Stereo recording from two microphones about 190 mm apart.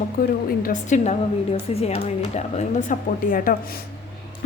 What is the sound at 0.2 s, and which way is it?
A woman's voice, 45° left (ahead or behind).